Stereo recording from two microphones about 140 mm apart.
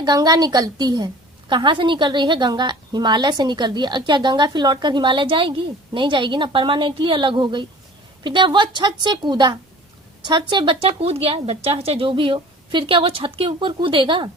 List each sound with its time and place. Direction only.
0.0 s a woman's voice: 30° right (ahead or behind)